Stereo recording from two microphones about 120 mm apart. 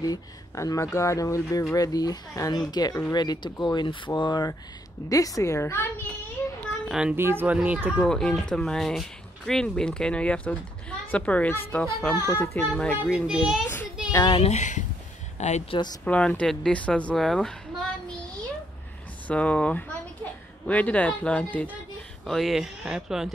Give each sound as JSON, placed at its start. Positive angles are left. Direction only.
{"t": 0.0, "sound": "speech", "side_deg": 30}
{"t": 6.4, "sound": "a sound", "side_deg": 10}
{"t": 6.9, "sound": "speech", "side_deg": -5}
{"t": 7.2, "sound": "speech", "side_deg": -20}
{"t": 8.0, "sound": "speech", "side_deg": 5}
{"t": 13.3, "sound": "speech", "side_deg": -5}
{"t": 14.4, "sound": "speech", "side_deg": 75}
{"t": 15.3, "sound": "a sound", "side_deg": 70}
{"t": 16.0, "sound": "speech", "side_deg": 10}
{"t": 19.2, "sound": "speech", "side_deg": 10}
{"t": 22.2, "sound": "speech", "side_deg": 0}